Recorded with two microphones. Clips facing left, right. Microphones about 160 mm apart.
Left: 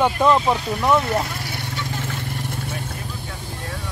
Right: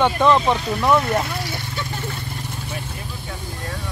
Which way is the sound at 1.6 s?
90° left.